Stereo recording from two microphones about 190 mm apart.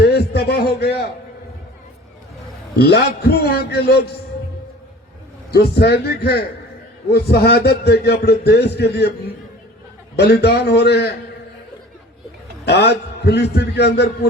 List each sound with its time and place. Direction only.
0.0 s a sound: 55° left (ahead or behind)
2.7 s a man's voice: 60° left (ahead or behind)
5.5 s a man's voice: 60° left (ahead or behind)
10.2 s a man's voice: 60° left (ahead or behind)
12.6 s a man's voice: 60° left (ahead or behind)